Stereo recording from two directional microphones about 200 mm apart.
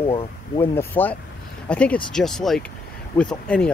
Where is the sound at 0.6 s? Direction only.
10° left (ahead or behind).